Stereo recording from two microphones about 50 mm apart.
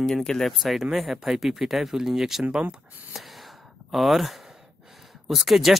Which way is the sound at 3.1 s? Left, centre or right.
Centre.